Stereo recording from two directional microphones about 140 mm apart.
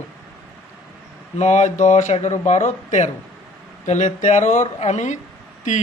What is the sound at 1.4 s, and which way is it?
Speech, 55° left (ahead or behind).